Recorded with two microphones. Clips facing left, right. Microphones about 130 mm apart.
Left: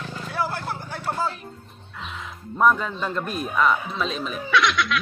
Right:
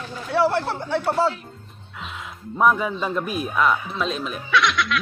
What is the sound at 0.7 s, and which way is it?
Speech, 25° right (ahead or behind).